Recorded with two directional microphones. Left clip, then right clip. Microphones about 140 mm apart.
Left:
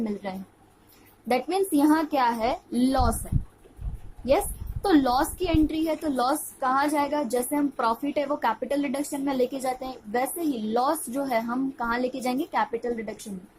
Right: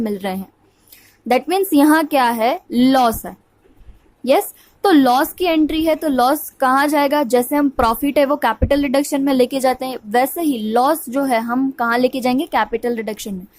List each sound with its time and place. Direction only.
0.0 s a woman's voice: 50° right (ahead or behind)
4.2 s a woman's voice: 50° right (ahead or behind)